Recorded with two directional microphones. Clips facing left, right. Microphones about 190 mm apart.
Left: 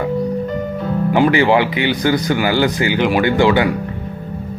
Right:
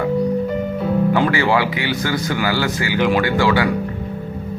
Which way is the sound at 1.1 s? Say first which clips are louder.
Left 8 dB; 20° left (ahead or behind).